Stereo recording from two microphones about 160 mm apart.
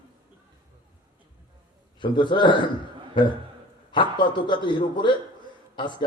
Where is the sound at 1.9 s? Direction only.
30° left (ahead or behind).